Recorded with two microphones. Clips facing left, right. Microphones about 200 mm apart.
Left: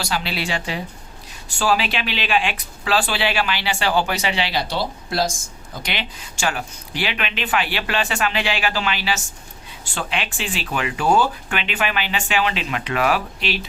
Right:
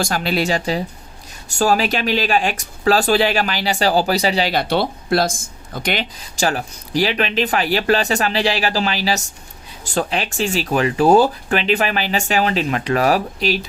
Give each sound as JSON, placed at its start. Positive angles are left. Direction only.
{"t": 0.0, "sound": "speech", "side_deg": -45}
{"t": 4.7, "sound": "speech", "side_deg": -60}
{"t": 5.8, "sound": "speech", "side_deg": -45}